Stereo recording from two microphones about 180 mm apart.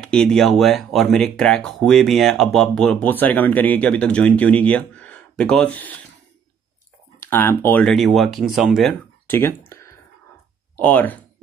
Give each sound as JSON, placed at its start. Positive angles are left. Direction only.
{"t": 0.0, "sound": "speech", "side_deg": 5}
{"t": 7.2, "sound": "speech", "side_deg": 10}
{"t": 9.3, "sound": "speech", "side_deg": 10}
{"t": 9.7, "sound": "clicking", "side_deg": 15}
{"t": 10.8, "sound": "speech", "side_deg": 10}